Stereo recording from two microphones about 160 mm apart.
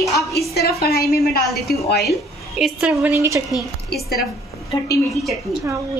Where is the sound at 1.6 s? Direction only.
80° left.